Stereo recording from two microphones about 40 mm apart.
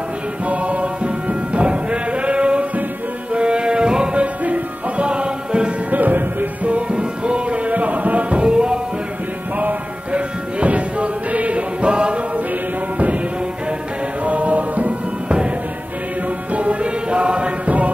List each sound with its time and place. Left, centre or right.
0.5 s music: right
4.2 s music: right
5.9 s music: right
6.7 s music: right
8.5 s music: right
10.1 s music: right
14.2 s music: right
16.5 s music: right